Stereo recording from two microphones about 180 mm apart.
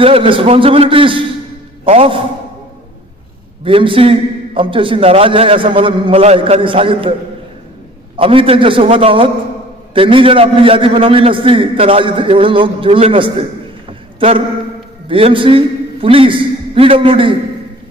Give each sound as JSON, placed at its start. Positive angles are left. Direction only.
{"t": 0.0, "sound": "a man's voice", "side_deg": -30}
{"t": 3.6, "sound": "a man's voice", "side_deg": -30}
{"t": 8.2, "sound": "a man's voice", "side_deg": -30}
{"t": 13.8, "sound": "a sound", "side_deg": -30}
{"t": 15.0, "sound": "a man's voice", "side_deg": -30}